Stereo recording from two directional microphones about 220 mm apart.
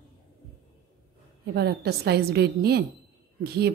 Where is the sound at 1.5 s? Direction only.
45° right (ahead or behind).